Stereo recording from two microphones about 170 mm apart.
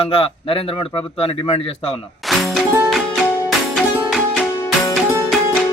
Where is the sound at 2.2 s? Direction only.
Centre (ahead or behind).